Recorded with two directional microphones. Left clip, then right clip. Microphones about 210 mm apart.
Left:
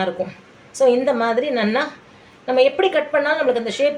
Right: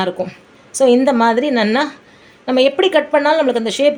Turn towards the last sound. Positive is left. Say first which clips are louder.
# right 4 dB
turn(degrees=-45)  # may be behind; listen again after turning